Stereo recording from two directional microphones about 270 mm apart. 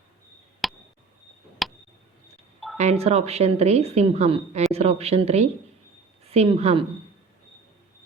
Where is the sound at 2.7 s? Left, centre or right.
Right.